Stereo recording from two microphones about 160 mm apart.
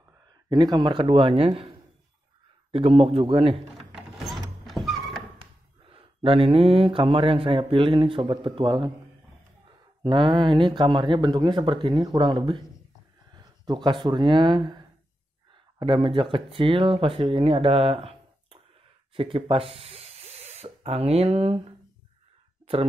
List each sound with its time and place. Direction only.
0.5 s a man's voice: 25° right (ahead or behind)
3.9 s a sound: centre (ahead or behind)
5.4 s speech: 35° right (ahead or behind)
10.0 s speech: 30° right (ahead or behind)